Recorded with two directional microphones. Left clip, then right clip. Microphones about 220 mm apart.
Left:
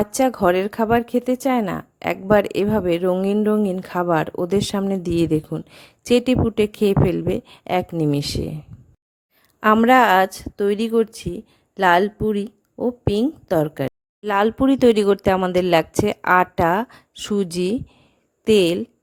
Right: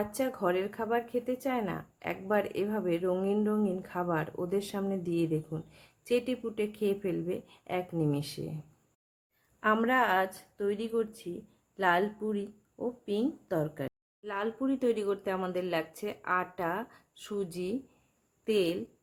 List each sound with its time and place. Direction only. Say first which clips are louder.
0.0 s speech: left 13 dB; 45° left (ahead or behind)
9.6 s speech: left 13 dB; 45° left (ahead or behind)